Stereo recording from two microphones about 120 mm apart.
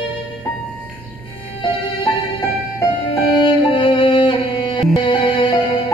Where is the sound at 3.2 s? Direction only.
45° left (ahead or behind).